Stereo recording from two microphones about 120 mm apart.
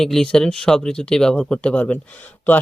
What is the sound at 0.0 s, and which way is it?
Speech, 5° left (ahead or behind).